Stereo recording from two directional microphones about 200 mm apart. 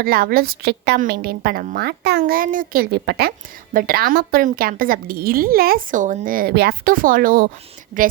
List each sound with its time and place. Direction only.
0.0 s a woman's voice: 50° right (ahead or behind)